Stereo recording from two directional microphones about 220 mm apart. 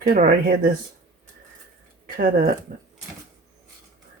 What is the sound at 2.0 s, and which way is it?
Speech, 40° right (ahead or behind).